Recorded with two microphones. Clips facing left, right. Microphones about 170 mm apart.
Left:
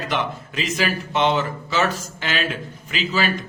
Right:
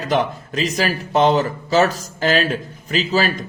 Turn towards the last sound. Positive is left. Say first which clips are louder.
# right 4 dB
turn(degrees=-40)  # may be behind; listen again after turning